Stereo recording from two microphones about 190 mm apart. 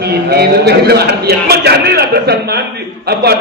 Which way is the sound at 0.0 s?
55° right (ahead or behind).